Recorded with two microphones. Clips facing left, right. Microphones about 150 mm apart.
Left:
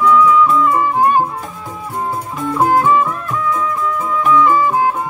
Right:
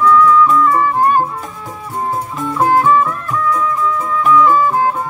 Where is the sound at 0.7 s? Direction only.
15° left (ahead or behind).